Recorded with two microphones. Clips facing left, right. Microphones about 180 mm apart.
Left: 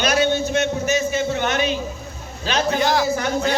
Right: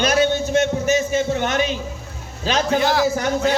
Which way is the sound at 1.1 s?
45° right (ahead or behind).